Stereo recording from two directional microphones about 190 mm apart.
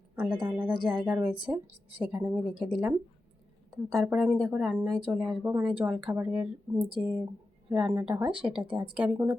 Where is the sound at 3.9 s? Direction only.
Centre (ahead or behind).